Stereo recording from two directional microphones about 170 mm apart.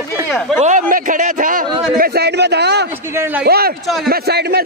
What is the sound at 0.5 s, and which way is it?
A man's voice, 50° right (ahead or behind).